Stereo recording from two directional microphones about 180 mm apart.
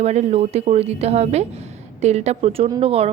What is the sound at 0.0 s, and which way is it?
A woman's voice, 40° right (ahead or behind).